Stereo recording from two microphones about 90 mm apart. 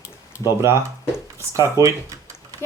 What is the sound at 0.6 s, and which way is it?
Speech, 30° right (ahead or behind).